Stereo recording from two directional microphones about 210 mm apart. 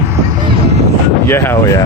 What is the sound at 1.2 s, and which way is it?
Speech, 10° left (ahead or behind).